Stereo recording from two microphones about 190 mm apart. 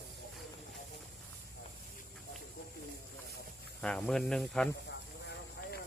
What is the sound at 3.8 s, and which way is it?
Speech, 5° left (ahead or behind).